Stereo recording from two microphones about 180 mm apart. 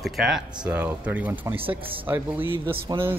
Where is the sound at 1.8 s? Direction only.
30° right (ahead or behind).